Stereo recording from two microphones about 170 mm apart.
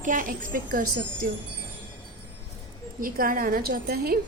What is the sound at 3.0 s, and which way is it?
A woman's voice, 55° right (ahead or behind).